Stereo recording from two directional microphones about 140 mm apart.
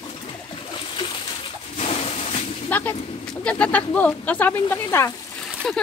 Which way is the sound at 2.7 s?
10° left (ahead or behind).